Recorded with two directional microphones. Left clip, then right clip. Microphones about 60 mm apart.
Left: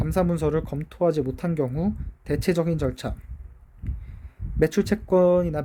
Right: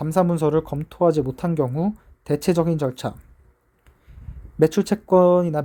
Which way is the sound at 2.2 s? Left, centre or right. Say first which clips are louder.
Right 4 dB; right.